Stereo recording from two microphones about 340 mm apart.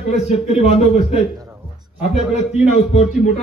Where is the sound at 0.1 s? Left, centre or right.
Centre.